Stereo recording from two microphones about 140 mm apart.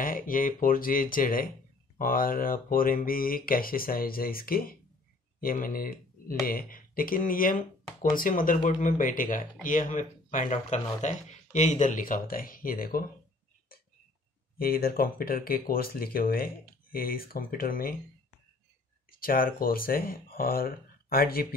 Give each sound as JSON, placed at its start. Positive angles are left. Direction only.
{"t": 0.0, "sound": "speech", "side_deg": 80}
{"t": 14.6, "sound": "speech", "side_deg": 90}
{"t": 19.1, "sound": "speech", "side_deg": 90}